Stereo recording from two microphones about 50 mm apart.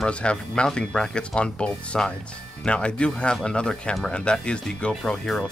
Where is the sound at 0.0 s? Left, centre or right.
Left.